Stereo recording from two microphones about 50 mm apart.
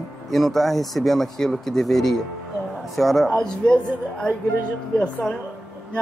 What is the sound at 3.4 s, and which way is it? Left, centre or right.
Speech, centre.